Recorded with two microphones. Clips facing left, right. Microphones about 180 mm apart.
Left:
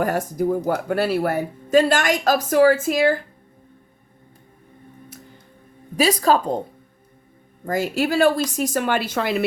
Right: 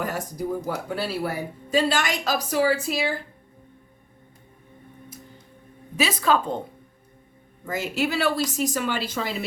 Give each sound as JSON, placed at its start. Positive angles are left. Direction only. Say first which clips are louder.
{"t": 0.0, "sound": "speech", "louder": "left 7 dB", "side_deg": 50}
{"t": 0.7, "sound": "speech", "louder": "left 7 dB", "side_deg": 65}
{"t": 6.0, "sound": "a woman's voice", "louder": "left 4 dB", "side_deg": 40}
{"t": 7.6, "sound": "speech", "louder": "left 4 dB", "side_deg": 40}